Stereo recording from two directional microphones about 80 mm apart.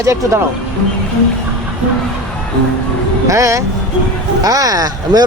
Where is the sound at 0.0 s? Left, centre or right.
Right.